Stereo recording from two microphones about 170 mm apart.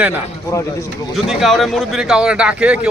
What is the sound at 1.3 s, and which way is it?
A man's voice, centre (ahead or behind).